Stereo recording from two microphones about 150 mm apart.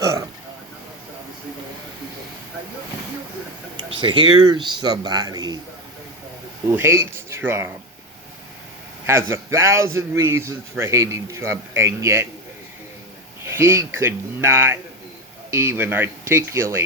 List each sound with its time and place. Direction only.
0.0 s a sound: 20° right (ahead or behind)
3.8 s speech: 35° right (ahead or behind)
6.7 s speech: 15° right (ahead or behind)
9.0 s a man's voice: 15° right (ahead or behind)
13.4 s a man's voice: 15° right (ahead or behind)